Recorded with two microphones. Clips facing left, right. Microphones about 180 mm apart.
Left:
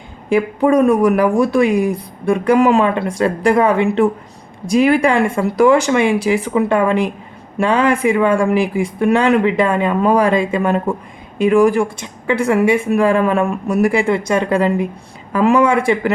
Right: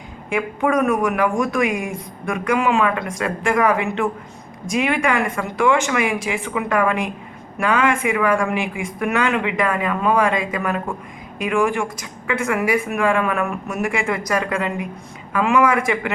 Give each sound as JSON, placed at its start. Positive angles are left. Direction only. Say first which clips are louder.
{"t": 0.3, "sound": "speech", "louder": "left 7 dB", "side_deg": 35}